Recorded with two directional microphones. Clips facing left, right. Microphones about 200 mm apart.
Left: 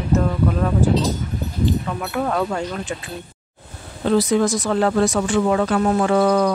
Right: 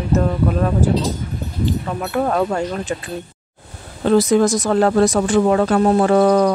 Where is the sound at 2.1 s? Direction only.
40° right (ahead or behind).